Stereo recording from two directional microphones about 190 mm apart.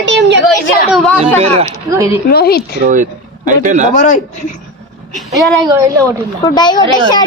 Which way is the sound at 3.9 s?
40° left (ahead or behind).